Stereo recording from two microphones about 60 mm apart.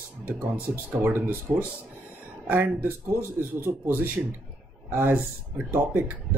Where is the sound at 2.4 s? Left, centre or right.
Right.